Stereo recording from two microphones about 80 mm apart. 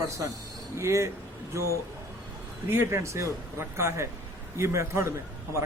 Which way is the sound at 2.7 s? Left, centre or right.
Right.